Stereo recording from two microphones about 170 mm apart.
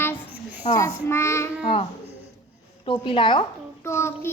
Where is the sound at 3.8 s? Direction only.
15° left (ahead or behind).